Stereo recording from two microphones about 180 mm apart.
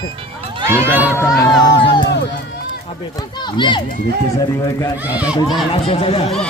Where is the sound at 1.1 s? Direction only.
15° left (ahead or behind).